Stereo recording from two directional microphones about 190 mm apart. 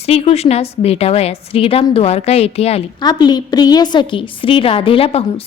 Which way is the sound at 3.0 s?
20° left (ahead or behind).